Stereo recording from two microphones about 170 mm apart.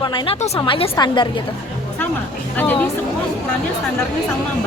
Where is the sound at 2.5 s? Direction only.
10° left (ahead or behind).